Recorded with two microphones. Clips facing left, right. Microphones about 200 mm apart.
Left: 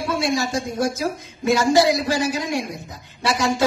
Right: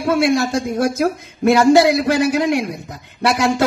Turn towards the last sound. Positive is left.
turn(degrees=-60)  # may be behind; listen again after turning